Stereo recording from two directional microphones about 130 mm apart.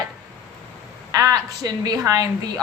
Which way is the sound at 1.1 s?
30° right (ahead or behind).